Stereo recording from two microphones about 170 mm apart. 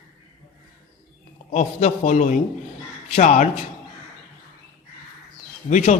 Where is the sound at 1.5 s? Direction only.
40° left (ahead or behind).